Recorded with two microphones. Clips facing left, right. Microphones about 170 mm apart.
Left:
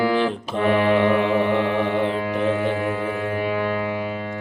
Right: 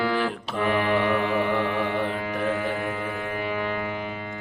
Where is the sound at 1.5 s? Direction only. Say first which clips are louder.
Left 4 dB; 20° left (ahead or behind).